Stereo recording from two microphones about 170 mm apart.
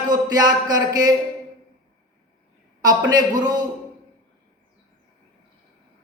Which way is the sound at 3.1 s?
25° right (ahead or behind).